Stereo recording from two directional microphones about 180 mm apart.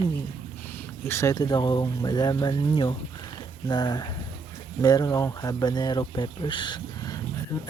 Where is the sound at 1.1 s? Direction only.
15° left (ahead or behind).